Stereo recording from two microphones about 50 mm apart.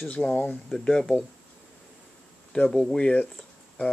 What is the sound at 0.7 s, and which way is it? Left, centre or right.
Speech, centre.